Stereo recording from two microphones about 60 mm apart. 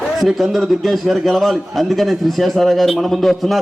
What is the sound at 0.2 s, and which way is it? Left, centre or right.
A man's voice, centre.